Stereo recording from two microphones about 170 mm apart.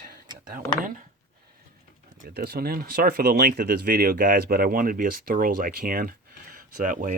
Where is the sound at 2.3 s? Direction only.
70° right (ahead or behind).